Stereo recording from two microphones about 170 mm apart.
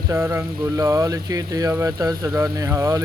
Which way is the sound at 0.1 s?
15° right (ahead or behind).